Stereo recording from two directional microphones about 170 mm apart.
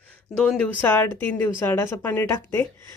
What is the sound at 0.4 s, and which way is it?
Speech, 10° left (ahead or behind).